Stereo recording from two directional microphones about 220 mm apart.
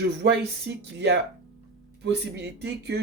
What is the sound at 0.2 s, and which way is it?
Speech, 45° right (ahead or behind).